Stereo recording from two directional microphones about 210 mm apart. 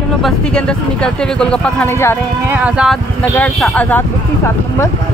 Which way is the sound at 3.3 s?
5° left (ahead or behind).